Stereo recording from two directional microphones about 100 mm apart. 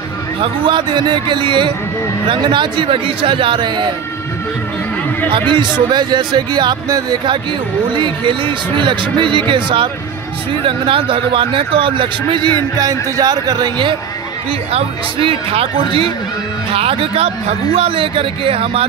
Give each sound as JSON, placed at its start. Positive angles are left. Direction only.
{"t": 0.4, "sound": "speech", "side_deg": -50}
{"t": 5.9, "sound": "speech", "side_deg": -45}
{"t": 14.7, "sound": "a man's voice", "side_deg": -75}